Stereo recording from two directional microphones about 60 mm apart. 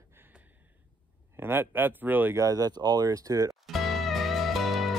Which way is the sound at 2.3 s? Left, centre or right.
Right.